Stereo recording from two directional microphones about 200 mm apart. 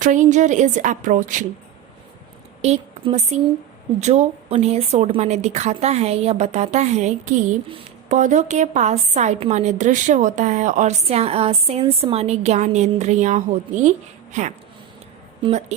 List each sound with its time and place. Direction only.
0.0 s a woman's voice: 40° right (ahead or behind)
2.6 s a woman's voice: 30° right (ahead or behind)